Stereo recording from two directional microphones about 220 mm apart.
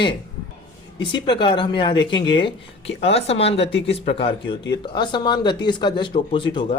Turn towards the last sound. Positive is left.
turn(degrees=25)  # may be behind; listen again after turning